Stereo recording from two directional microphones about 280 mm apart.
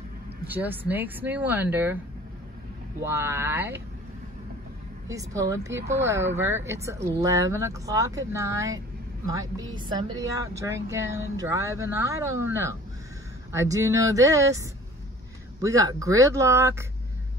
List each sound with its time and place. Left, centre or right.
0.5 s speech: centre
3.0 s speech: centre
5.0 s speech: centre